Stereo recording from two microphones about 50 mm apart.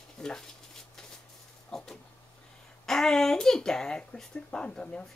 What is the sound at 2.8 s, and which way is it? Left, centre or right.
Speech, centre.